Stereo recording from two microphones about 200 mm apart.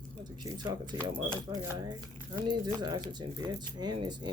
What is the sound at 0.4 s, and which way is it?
Speech, 20° right (ahead or behind).